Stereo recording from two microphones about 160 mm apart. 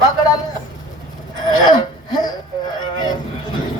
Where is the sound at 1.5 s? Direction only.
25° left (ahead or behind).